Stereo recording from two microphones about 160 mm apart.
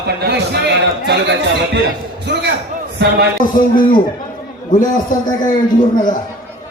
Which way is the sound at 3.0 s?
90° right.